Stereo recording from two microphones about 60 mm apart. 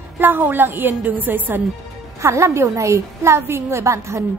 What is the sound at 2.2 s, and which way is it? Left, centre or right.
A woman's voice, right.